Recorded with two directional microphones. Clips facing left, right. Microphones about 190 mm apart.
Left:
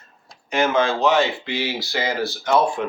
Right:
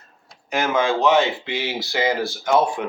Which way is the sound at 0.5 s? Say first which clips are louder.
Left 1 dB; 10° right (ahead or behind).